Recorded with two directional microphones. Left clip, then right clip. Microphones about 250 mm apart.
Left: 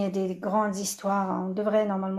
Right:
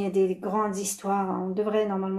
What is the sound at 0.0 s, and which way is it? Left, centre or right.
Speech, left.